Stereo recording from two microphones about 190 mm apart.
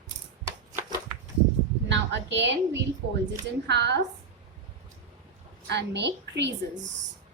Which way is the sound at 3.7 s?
65° right (ahead or behind).